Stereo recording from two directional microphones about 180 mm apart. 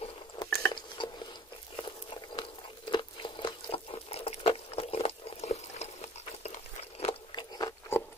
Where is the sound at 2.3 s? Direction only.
25° left (ahead or behind).